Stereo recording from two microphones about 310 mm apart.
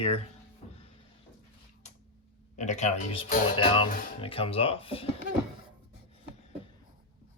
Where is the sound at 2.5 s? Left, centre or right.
Left.